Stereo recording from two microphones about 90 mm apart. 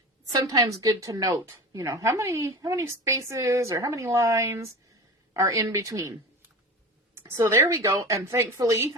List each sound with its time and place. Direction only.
0.3 s a woman's voice: 45° right (ahead or behind)
1.5 s a woman's voice: 30° right (ahead or behind)
7.2 s a woman's voice: 30° right (ahead or behind)